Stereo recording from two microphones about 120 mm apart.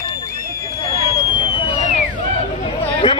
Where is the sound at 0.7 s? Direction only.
30° left (ahead or behind).